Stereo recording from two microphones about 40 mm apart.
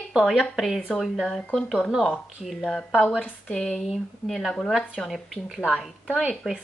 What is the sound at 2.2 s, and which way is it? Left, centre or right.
Speech, centre.